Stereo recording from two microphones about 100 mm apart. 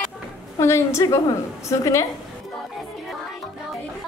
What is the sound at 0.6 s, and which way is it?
A woman's voice, 30° left (ahead or behind).